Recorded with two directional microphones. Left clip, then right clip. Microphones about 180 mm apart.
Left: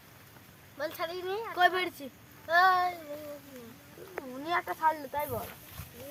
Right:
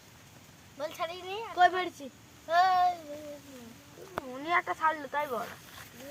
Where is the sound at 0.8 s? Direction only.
25° left (ahead or behind).